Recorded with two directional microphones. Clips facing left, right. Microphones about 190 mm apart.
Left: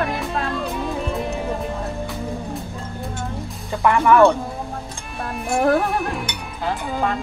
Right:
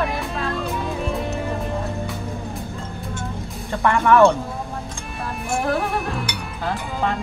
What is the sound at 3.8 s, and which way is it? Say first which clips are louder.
Speech: left 1 dB; 5° left (ahead or behind).